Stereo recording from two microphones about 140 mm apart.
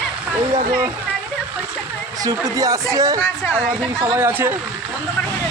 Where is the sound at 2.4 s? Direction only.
25° right (ahead or behind).